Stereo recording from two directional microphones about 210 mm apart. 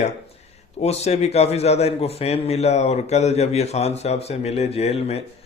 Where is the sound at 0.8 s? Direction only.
30° left (ahead or behind).